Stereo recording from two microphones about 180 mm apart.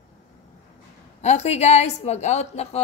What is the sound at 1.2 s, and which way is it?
A woman's voice, 40° left (ahead or behind).